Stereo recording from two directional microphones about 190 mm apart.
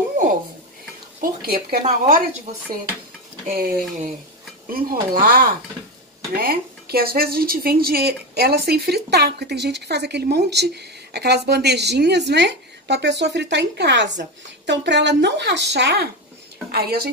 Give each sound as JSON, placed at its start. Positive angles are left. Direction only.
{"t": 1.2, "sound": "a woman's voice", "side_deg": -50}
{"t": 3.4, "sound": "a woman's voice", "side_deg": -50}